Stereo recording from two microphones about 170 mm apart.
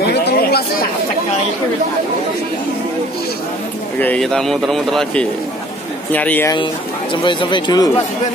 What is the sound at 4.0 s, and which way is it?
Speech, 5° left (ahead or behind).